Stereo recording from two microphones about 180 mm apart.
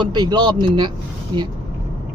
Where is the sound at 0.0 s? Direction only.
25° right (ahead or behind).